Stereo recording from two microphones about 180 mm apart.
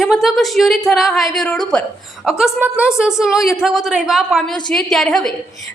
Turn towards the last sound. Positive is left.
turn(degrees=0)  # may be behind; listen again after turning